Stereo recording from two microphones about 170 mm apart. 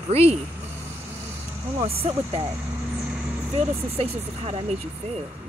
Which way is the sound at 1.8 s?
35° right (ahead or behind).